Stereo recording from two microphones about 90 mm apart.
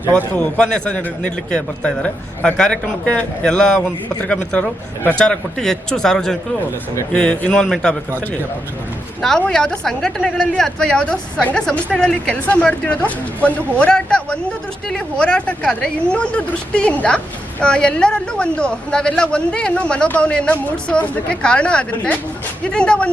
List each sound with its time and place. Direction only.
0.3 s speech: 15° left (ahead or behind)
9.5 s speech: 10° left (ahead or behind)